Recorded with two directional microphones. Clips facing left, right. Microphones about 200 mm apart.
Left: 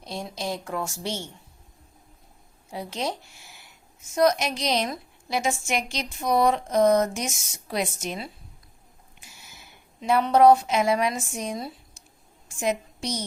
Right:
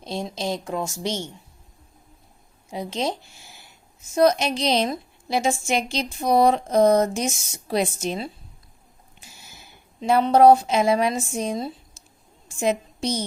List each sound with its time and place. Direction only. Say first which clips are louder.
0.0 s a woman's voice: right 4 dB; 25° right (ahead or behind)
2.6 s a woman's voice: right 4 dB; 20° right (ahead or behind)
10.0 s a woman's voice: right 3 dB; 30° right (ahead or behind)